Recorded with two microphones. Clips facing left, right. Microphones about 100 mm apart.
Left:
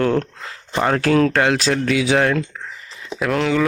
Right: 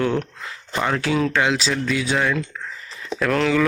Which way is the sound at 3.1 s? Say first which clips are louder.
Even; 15° left (ahead or behind).